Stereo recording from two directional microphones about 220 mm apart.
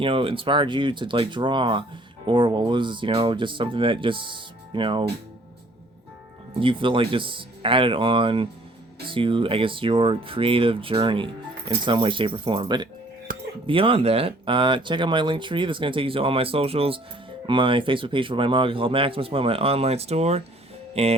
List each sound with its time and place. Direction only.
0.0 s speech: 25° right (ahead or behind)
6.6 s speech: 25° right (ahead or behind)
13.3 s a sound: 40° right (ahead or behind)
13.7 s speech: 25° right (ahead or behind)
20.9 s music: 25° right (ahead or behind)